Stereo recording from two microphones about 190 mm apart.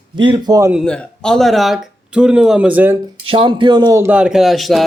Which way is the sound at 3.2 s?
25° right (ahead or behind).